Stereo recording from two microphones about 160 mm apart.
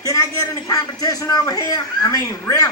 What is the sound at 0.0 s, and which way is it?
A man's voice, 20° left (ahead or behind).